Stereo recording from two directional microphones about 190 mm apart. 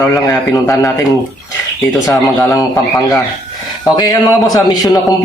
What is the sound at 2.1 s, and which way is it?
Speech, 20° left (ahead or behind).